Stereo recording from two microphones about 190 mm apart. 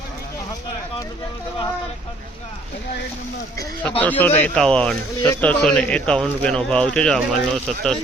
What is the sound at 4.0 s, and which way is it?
Speech, 10° left (ahead or behind).